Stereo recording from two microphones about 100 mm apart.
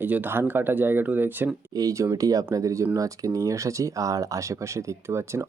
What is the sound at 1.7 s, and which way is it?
Speech, 35° right (ahead or behind).